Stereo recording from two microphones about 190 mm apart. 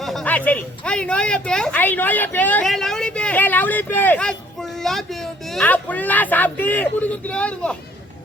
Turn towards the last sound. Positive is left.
turn(degrees=5)  # may be behind; listen again after turning